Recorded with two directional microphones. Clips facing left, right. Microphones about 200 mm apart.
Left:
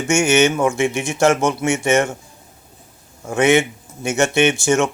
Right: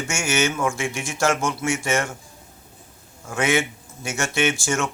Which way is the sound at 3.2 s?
20° left (ahead or behind).